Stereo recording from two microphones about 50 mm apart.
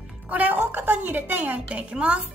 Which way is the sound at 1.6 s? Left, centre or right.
Right.